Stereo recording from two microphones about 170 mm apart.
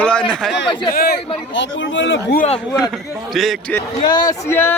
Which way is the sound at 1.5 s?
90° left.